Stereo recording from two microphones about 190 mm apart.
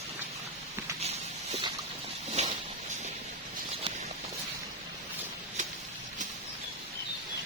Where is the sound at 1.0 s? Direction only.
35° right (ahead or behind).